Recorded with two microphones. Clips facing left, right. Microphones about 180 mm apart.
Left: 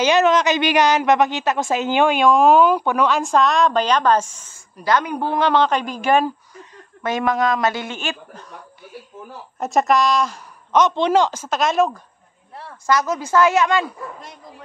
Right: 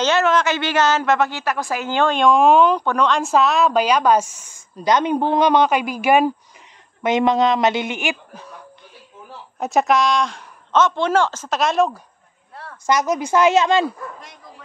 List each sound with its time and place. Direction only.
0.0 s a woman's voice: 15° left (ahead or behind); by 4.6 s 10° right (ahead or behind)
4.7 s a woman's voice: 20° right (ahead or behind)
7.0 s a woman's voice: 20° right (ahead or behind)
9.6 s a woman's voice: centre (ahead or behind)
10.8 s a woman's voice: 15° left (ahead or behind)
11.4 s speech: centre (ahead or behind)
12.8 s a woman's voice: 20° right (ahead or behind)